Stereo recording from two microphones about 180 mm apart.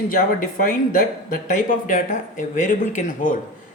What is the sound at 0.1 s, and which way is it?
Speech, 50° left (ahead or behind).